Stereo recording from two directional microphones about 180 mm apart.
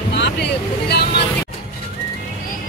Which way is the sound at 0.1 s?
70° left (ahead or behind).